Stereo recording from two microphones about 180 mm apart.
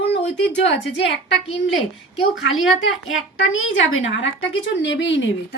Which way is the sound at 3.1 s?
90° left.